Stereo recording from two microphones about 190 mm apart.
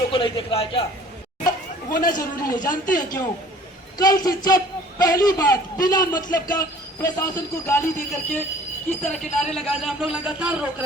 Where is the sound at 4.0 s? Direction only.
20° left (ahead or behind).